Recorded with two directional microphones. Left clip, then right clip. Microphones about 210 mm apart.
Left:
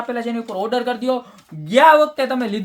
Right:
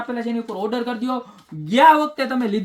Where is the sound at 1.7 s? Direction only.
15° left (ahead or behind).